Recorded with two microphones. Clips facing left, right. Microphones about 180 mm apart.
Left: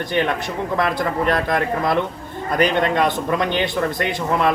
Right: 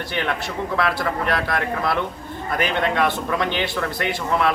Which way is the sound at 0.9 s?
20° left (ahead or behind).